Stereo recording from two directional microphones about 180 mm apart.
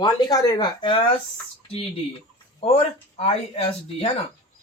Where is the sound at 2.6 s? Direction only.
30° left (ahead or behind).